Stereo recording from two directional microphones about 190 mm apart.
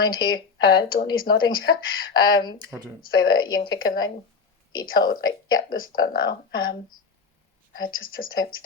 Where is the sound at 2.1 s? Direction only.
20° left (ahead or behind).